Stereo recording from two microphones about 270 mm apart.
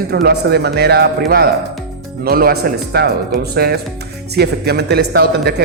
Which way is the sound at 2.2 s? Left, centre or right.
Right.